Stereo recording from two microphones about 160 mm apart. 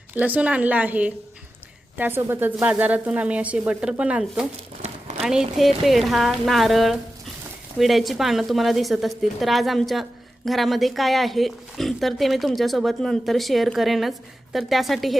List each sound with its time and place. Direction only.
0.2 s speech: 10° right (ahead or behind)
4.8 s a sound: 40° right (ahead or behind)
5.2 s a woman's voice: 5° right (ahead or behind)